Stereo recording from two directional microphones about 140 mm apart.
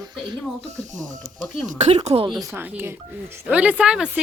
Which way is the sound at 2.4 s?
15° right (ahead or behind).